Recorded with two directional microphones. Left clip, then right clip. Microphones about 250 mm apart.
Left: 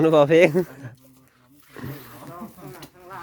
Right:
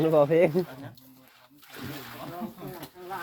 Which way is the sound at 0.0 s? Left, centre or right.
Left.